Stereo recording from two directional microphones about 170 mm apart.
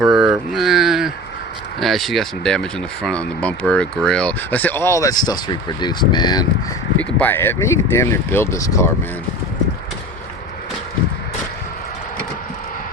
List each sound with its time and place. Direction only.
0.0 s a sound: centre (ahead or behind)
1.8 s speech: centre (ahead or behind); by 6.5 s 25° left (ahead or behind)
7.0 s speech: 10° left (ahead or behind)